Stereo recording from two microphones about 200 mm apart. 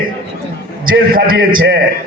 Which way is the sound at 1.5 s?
80° right.